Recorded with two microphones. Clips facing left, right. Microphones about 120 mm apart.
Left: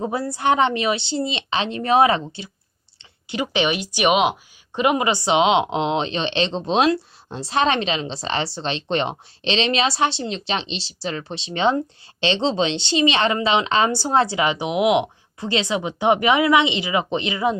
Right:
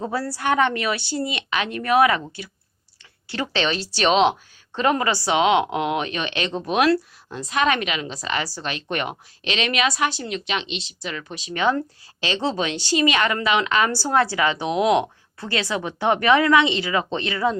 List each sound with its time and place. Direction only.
0.0 s speech: 20° left (ahead or behind)